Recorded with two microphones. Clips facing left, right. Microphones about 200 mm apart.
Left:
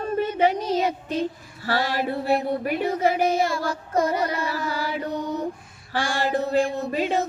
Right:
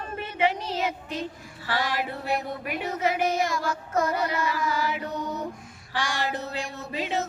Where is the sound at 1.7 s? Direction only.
40° left (ahead or behind).